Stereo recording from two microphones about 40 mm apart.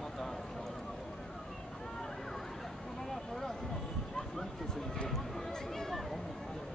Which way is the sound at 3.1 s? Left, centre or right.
Centre.